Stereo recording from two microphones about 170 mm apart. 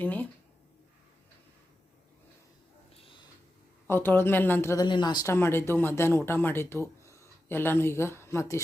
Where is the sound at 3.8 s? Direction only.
15° left (ahead or behind).